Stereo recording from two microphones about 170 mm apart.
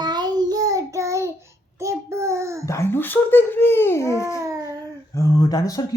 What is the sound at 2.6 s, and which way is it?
Speech, 15° left (ahead or behind).